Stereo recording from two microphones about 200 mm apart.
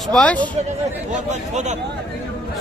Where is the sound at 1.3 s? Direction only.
35° right (ahead or behind).